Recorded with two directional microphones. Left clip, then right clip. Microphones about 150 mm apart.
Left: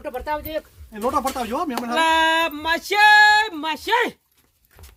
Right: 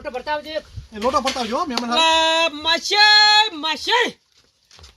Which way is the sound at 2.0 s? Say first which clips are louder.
Right 1 dB; 5° right (ahead or behind).